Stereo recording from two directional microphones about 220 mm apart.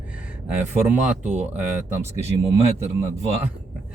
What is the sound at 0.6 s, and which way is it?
Speech, 10° right (ahead or behind).